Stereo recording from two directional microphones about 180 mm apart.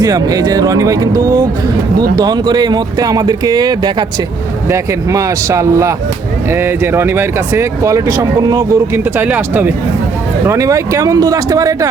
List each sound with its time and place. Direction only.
0.0 s speech: 20° right (ahead or behind)
9.1 s speech: 10° right (ahead or behind)